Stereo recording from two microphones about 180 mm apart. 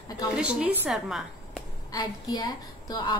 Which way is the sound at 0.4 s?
5° right (ahead or behind).